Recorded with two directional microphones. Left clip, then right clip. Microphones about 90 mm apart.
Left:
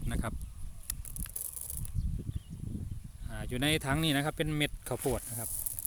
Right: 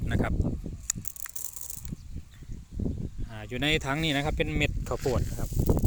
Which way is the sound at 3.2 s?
20° left (ahead or behind).